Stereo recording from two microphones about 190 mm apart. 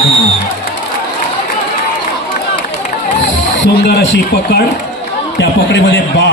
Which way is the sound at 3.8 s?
65° left (ahead or behind).